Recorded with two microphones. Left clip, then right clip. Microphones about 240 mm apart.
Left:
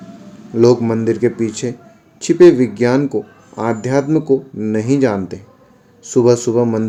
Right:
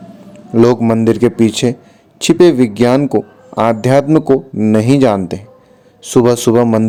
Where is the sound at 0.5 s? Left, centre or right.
Right.